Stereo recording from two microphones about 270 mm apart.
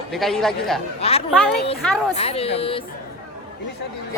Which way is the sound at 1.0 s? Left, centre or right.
Left.